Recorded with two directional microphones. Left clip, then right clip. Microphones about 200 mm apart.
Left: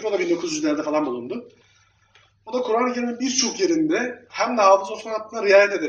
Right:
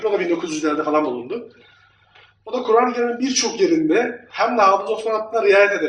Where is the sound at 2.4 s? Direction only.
45° left (ahead or behind).